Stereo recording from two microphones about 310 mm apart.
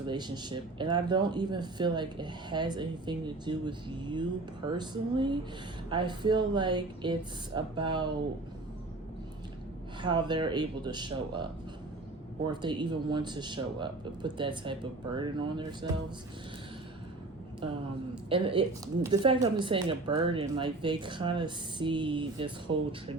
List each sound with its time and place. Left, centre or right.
0.0 s speech: centre
10.0 s speech: centre
12.5 s speech: centre
18.3 s speech: centre